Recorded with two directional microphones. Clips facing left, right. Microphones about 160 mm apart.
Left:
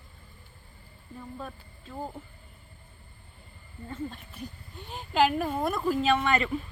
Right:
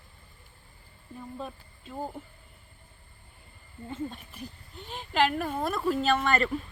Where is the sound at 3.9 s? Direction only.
15° right (ahead or behind).